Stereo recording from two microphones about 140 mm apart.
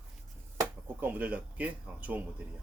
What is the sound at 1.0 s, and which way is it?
Speech, 10° right (ahead or behind).